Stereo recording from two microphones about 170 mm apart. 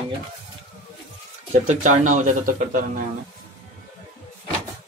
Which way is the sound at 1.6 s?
50° right (ahead or behind).